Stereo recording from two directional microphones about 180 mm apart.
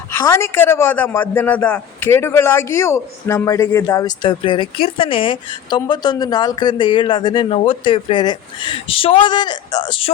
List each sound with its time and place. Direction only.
0.3 s a man's voice: 15° left (ahead or behind)